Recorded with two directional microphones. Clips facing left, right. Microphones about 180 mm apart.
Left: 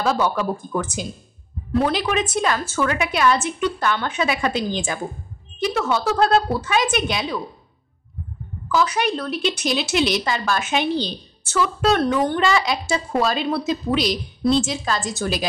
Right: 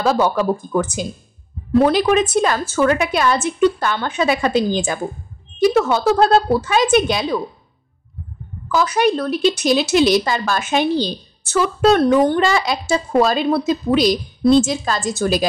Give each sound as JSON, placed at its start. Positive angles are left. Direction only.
{"t": 0.0, "sound": "speech", "side_deg": -40}
{"t": 8.7, "sound": "speech", "side_deg": -40}